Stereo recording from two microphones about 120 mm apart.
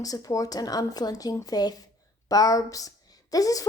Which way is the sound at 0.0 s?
30° left (ahead or behind).